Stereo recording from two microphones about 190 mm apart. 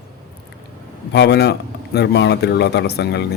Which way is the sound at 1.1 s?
65° left (ahead or behind).